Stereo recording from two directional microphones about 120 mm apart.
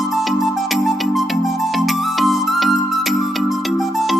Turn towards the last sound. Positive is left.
turn(degrees=0)  # may be behind; listen again after turning